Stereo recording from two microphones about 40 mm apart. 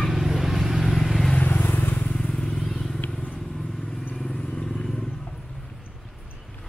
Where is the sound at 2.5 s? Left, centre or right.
Centre.